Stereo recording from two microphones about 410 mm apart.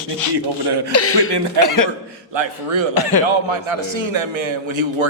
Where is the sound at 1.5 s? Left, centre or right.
Left.